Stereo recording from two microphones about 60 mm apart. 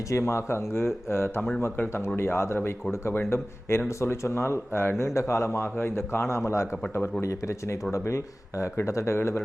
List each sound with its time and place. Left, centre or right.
0.1 s speech: left